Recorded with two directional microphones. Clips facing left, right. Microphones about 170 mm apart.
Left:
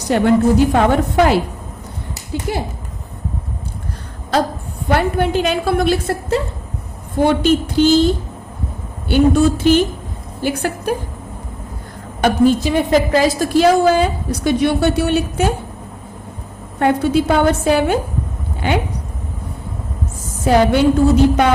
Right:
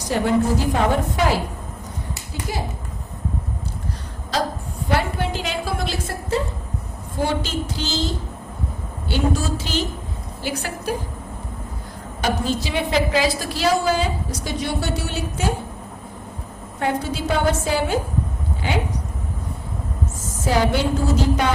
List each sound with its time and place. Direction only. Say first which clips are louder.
0.1 s a woman's voice: left 6 dB; 65° left (ahead or behind)
4.9 s a woman's voice: left 7 dB; 55° left (ahead or behind)
12.2 s a woman's voice: left 10 dB; 50° left (ahead or behind)
16.8 s a woman's voice: left 9 dB; 60° left (ahead or behind)
20.4 s a woman's voice: left 6 dB; 60° left (ahead or behind)